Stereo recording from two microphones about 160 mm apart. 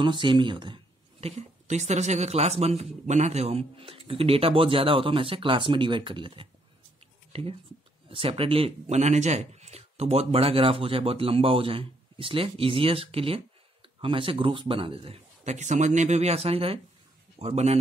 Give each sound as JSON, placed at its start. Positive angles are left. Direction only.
{"t": 0.0, "sound": "speech", "side_deg": -30}
{"t": 8.1, "sound": "speech", "side_deg": -35}